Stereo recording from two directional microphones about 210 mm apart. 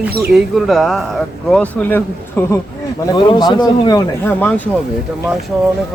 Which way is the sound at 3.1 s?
20° left (ahead or behind).